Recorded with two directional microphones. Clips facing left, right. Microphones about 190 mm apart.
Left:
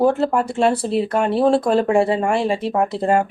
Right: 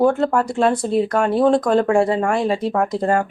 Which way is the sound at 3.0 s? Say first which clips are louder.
Left 2 dB; 15° left (ahead or behind).